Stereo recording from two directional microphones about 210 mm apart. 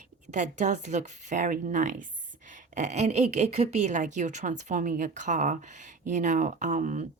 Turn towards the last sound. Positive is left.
turn(degrees=-35)  # may be behind; listen again after turning